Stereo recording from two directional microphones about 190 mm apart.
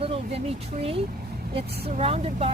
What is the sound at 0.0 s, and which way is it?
Speech, 30° right (ahead or behind).